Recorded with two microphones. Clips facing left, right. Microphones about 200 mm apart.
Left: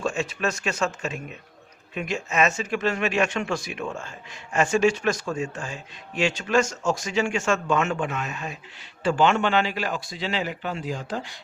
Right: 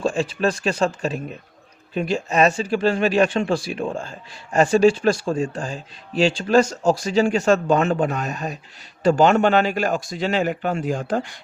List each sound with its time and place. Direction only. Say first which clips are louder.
0.0 s speech: right 5 dB; 30° right (ahead or behind); by 11.3 s 50° right (ahead or behind)